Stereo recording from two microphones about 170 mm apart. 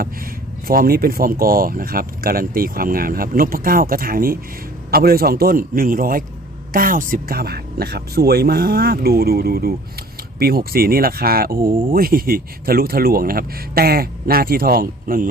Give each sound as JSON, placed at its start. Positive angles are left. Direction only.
{"t": 0.7, "sound": "speech", "side_deg": -60}